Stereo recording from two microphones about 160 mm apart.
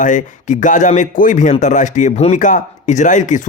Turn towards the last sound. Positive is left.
turn(degrees=50)  # may be behind; listen again after turning